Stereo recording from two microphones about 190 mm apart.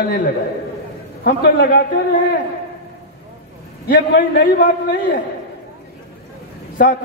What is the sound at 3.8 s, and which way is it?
Speech, 50° left (ahead or behind).